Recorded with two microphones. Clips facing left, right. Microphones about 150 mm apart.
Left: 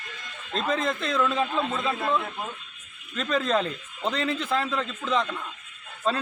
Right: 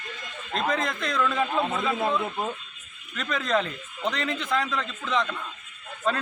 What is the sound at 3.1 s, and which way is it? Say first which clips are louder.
A man's voice: left 1 dB; 30° left (ahead or behind).